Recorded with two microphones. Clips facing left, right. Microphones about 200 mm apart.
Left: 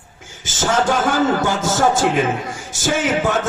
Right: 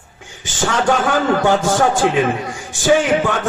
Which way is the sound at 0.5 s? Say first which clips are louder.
Even; 45° left (ahead or behind).